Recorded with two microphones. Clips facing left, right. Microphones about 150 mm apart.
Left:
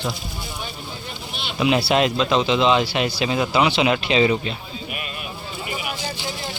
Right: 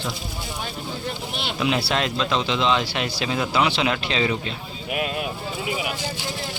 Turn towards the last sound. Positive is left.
turn(degrees=-90)